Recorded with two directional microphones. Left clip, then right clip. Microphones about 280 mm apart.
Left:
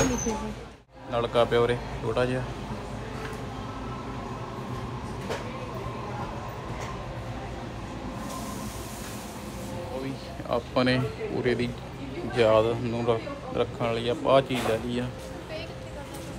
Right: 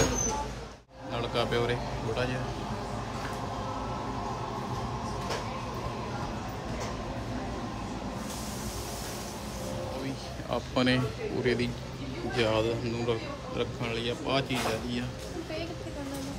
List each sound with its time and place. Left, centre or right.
1.1 s speech: centre
10.5 s speech: centre